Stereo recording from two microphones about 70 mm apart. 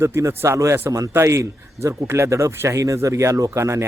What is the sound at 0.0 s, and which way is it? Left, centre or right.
Speech, right.